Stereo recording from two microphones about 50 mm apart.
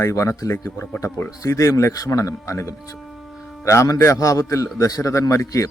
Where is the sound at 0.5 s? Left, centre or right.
Left.